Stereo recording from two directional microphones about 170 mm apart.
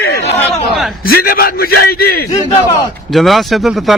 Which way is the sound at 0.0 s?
70° left (ahead or behind).